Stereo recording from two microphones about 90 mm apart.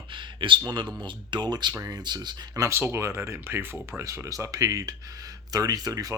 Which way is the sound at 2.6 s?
30° right (ahead or behind).